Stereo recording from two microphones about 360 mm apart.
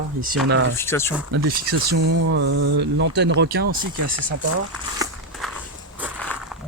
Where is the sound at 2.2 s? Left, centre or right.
Right.